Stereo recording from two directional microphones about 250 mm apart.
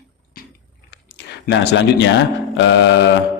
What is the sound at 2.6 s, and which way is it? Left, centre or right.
Speech, left.